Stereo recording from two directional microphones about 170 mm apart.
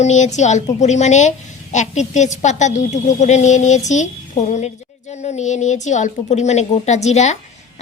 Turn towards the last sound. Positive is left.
turn(degrees=40)  # may be behind; listen again after turning